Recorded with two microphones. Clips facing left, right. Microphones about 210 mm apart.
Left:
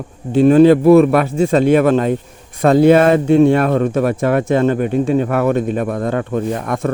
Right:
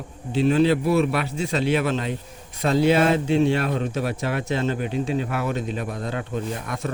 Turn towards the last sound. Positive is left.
turn(degrees=50)  # may be behind; listen again after turning